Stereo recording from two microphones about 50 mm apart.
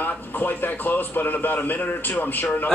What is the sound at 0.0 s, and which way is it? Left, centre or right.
A man's voice, left.